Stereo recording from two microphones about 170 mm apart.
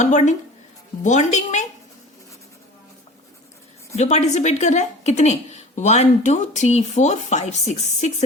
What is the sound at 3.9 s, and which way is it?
A woman's voice, 40° left (ahead or behind).